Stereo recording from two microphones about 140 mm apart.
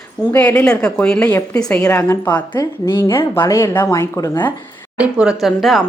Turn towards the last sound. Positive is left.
turn(degrees=0)  # may be behind; listen again after turning